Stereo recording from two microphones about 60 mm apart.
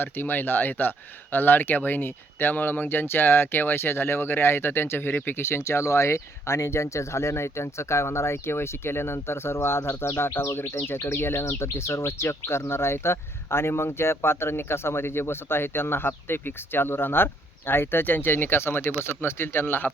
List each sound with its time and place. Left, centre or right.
0.0 s speech: left